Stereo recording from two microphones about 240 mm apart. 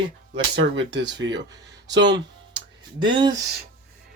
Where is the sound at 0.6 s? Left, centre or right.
Right.